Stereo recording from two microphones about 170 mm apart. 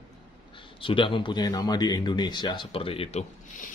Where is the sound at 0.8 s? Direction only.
30° left (ahead or behind).